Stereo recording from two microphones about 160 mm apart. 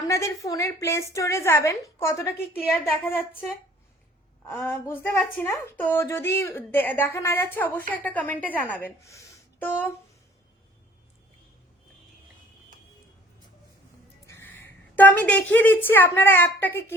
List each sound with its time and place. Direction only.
0.1 s a woman's voice: 20° left (ahead or behind)
4.4 s a woman's voice: 15° left (ahead or behind)
14.3 s a woman's voice: 15° left (ahead or behind)